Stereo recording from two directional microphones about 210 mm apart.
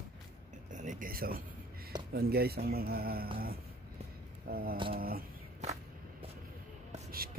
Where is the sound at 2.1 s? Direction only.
50° right (ahead or behind).